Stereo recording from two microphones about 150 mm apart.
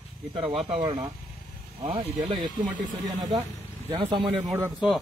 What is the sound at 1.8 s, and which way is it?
Speech, 35° right (ahead or behind).